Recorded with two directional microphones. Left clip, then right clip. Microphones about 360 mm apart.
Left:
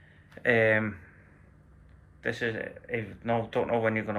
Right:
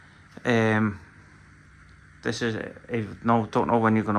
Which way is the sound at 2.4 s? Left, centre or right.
Right.